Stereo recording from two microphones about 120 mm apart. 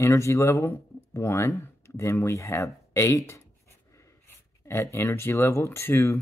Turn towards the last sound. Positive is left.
turn(degrees=20)  # may be behind; listen again after turning